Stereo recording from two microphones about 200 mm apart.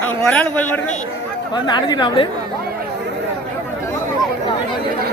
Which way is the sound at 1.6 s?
20° left (ahead or behind).